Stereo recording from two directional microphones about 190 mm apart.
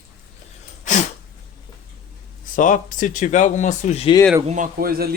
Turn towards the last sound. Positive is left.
turn(degrees=-50)  # may be behind; listen again after turning